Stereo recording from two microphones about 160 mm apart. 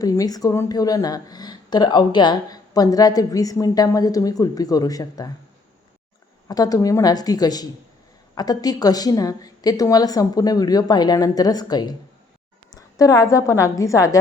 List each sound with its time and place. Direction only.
0.0 s speech: 20° left (ahead or behind)
6.5 s speech: 25° left (ahead or behind)